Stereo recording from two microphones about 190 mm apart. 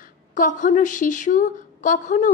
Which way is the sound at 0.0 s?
45° left (ahead or behind).